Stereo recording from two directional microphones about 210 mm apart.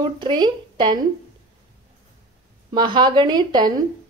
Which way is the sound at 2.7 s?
20° right (ahead or behind).